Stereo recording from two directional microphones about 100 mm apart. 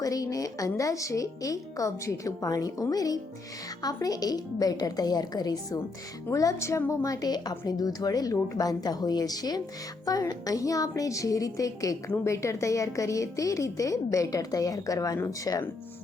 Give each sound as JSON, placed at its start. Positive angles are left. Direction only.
{"t": 0.0, "sound": "a woman's voice", "side_deg": 35}